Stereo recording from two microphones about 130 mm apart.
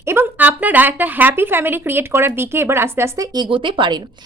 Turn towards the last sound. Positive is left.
turn(degrees=-40)  # may be behind; listen again after turning